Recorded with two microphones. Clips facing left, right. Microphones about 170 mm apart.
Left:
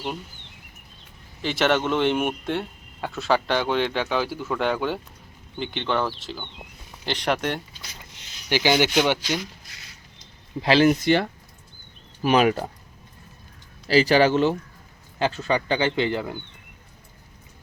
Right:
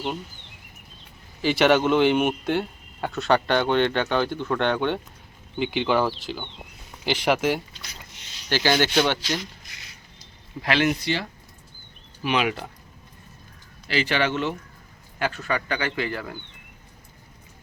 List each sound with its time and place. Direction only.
1.4 s speech: centre (ahead or behind)
8.4 s speech: 15° left (ahead or behind)
10.6 s speech: 30° left (ahead or behind)
11.0 s speech: 55° left (ahead or behind)
12.2 s speech: 40° left (ahead or behind)
13.8 s speech: 35° left (ahead or behind); by 16.4 s 20° left (ahead or behind)